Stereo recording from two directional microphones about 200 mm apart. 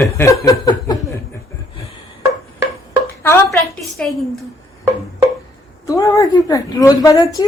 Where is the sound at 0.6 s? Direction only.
20° left (ahead or behind).